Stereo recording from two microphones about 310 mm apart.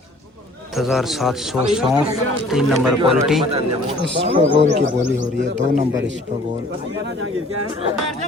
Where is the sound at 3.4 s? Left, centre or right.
Centre.